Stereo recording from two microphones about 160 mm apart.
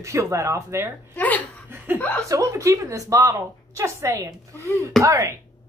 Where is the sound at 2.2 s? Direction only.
20° right (ahead or behind).